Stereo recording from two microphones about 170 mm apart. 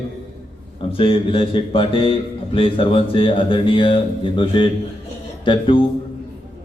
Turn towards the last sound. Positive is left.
turn(degrees=30)  # may be behind; listen again after turning